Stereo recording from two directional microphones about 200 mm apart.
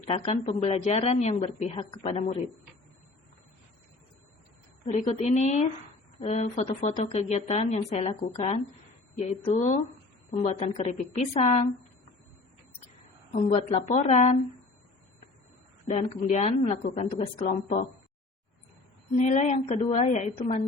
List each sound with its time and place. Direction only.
0.0 s speech: 30° left (ahead or behind)
4.9 s speech: 35° left (ahead or behind)
13.3 s speech: 35° left (ahead or behind)
16.2 s speech: 40° left (ahead or behind)
19.1 s speech: 35° left (ahead or behind)